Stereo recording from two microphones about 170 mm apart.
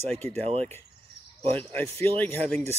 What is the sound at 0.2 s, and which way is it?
Speech, 40° right (ahead or behind).